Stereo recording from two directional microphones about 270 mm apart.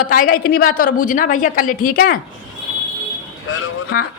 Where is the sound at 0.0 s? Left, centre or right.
Left.